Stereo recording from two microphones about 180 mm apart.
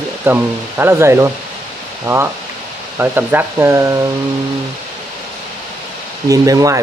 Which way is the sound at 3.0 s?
10° right (ahead or behind).